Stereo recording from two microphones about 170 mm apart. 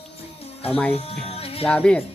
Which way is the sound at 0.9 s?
35° left (ahead or behind).